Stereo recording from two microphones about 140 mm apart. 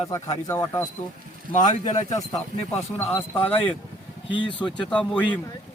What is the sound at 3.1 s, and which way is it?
Speech, 15° left (ahead or behind).